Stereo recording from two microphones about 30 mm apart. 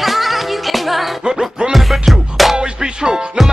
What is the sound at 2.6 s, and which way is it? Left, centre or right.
Music, right.